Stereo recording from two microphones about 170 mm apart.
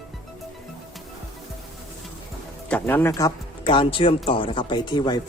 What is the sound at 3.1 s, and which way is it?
Speech, 20° left (ahead or behind).